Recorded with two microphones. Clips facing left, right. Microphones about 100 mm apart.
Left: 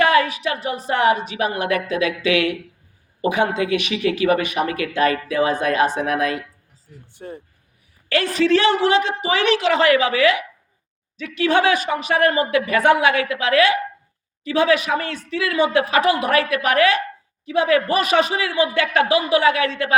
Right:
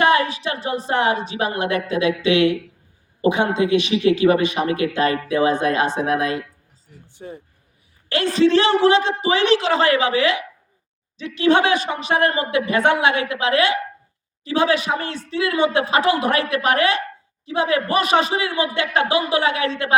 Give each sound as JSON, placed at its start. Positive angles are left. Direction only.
{"t": 0.0, "sound": "a woman's voice", "side_deg": -30}
{"t": 7.1, "sound": "speech", "side_deg": -15}
{"t": 8.1, "sound": "a woman's voice", "side_deg": -30}